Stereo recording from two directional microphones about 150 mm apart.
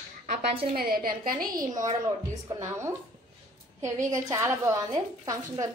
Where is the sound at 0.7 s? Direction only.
80° right.